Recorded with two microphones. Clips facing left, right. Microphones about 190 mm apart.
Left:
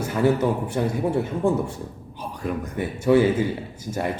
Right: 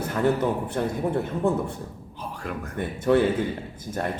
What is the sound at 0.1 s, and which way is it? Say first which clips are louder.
Speech: left 3 dB; 5° left (ahead or behind).